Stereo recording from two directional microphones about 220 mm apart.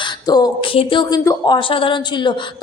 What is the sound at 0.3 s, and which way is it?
A woman's voice, 20° left (ahead or behind).